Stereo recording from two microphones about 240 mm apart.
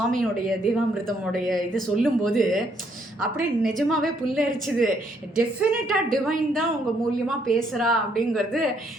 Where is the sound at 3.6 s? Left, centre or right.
Centre.